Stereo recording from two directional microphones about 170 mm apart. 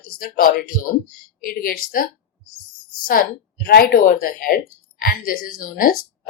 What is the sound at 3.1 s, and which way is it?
A woman's voice, 60° left (ahead or behind).